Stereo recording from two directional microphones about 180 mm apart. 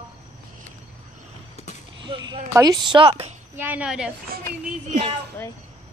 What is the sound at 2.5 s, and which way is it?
Speech, 20° right (ahead or behind).